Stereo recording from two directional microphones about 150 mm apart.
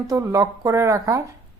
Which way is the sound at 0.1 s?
25° right (ahead or behind).